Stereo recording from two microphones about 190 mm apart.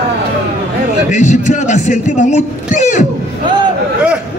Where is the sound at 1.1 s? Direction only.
40° left (ahead or behind).